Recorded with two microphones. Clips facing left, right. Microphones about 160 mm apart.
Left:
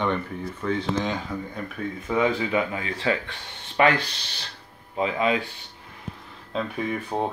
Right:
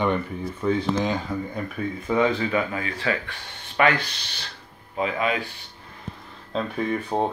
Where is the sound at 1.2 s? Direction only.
Centre (ahead or behind); by 5.3 s 25° left (ahead or behind).